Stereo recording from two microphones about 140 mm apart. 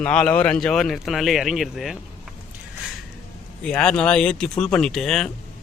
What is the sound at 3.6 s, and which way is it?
Speech, 5° left (ahead or behind).